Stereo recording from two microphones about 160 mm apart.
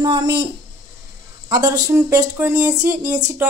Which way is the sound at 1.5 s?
25° right (ahead or behind).